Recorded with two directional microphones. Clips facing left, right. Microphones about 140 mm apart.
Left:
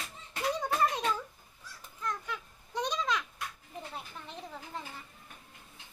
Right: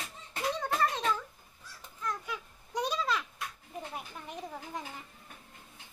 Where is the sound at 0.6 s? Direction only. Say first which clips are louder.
Even; 15° left (ahead or behind).